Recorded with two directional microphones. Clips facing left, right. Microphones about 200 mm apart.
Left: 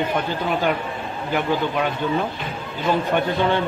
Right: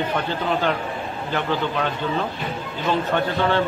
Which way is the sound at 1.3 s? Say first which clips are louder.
Left 2 dB; 10° left (ahead or behind).